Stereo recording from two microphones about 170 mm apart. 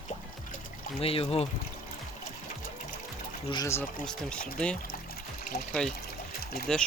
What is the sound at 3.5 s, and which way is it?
Speech, 20° left (ahead or behind).